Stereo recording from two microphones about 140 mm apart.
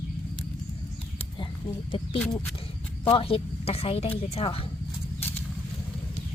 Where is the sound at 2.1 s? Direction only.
10° left (ahead or behind).